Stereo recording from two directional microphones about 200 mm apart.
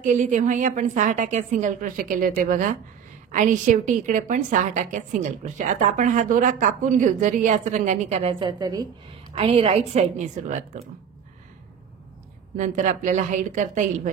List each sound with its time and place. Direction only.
0.0 s a woman's voice: 40° right (ahead or behind)
12.5 s a woman's voice: 40° right (ahead or behind)